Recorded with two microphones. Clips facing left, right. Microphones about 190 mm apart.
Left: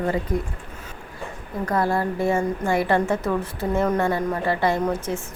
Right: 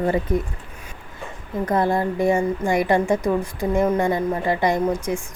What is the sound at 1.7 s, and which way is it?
A woman's voice, 20° right (ahead or behind).